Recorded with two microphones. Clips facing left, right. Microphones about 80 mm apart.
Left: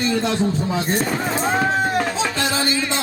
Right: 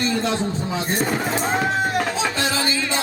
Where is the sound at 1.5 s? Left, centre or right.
Centre.